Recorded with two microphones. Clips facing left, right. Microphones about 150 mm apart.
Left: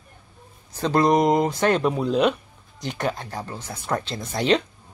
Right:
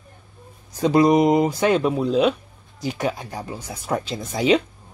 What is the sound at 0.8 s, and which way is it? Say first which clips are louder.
A man's voice: right 3 dB; 10° right (ahead or behind).